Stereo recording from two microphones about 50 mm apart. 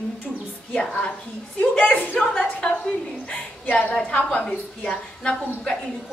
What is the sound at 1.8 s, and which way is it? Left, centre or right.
Speech, left.